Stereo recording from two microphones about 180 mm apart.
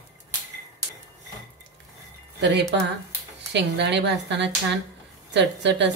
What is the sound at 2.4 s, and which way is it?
A woman's voice, 70° right (ahead or behind).